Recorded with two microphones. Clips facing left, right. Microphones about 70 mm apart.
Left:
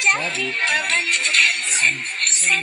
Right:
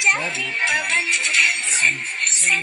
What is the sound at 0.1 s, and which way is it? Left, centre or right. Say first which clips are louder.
Speech: left 1 dB; centre.